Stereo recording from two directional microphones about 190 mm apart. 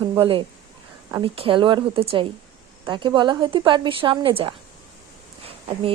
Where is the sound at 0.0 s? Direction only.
25° right (ahead or behind).